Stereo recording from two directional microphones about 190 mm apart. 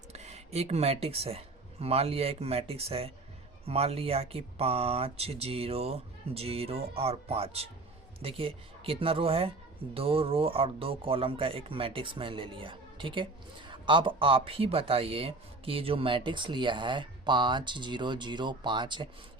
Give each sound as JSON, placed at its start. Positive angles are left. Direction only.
{"t": 0.1, "sound": "speech", "side_deg": -35}